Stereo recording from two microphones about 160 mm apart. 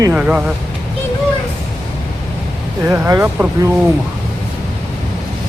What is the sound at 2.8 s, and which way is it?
Speech, 15° right (ahead or behind).